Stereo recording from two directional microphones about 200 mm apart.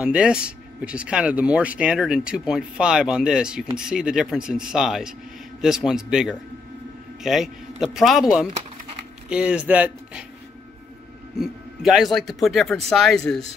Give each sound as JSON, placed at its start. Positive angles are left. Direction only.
{"t": 0.0, "sound": "speech", "side_deg": -5}
{"t": 9.3, "sound": "speech", "side_deg": -5}
{"t": 11.3, "sound": "speech", "side_deg": 0}